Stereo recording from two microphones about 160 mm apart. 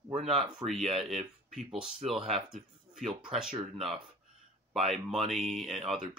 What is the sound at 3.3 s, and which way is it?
Speech, 5° right (ahead or behind).